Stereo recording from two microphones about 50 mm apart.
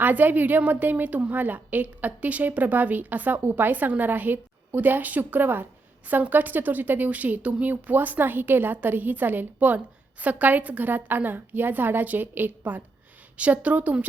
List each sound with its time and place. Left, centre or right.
0.0 s a woman's voice: right